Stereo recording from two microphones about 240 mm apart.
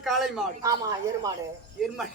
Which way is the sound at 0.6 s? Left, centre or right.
Centre.